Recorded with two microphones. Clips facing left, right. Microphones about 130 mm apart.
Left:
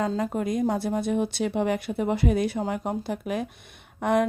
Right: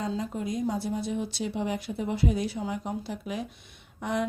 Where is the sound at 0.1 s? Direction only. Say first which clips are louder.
Left 5 dB; 55° left (ahead or behind).